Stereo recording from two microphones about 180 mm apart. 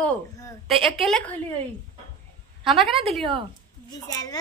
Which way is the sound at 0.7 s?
30° right (ahead or behind).